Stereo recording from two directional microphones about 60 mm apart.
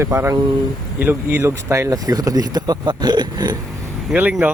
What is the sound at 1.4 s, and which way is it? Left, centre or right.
Speech, right.